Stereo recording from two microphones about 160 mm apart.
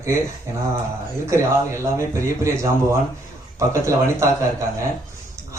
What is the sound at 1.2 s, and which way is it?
A man's voice, 20° right (ahead or behind).